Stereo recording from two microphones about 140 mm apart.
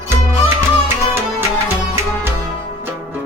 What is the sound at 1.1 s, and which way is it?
Music, 15° right (ahead or behind).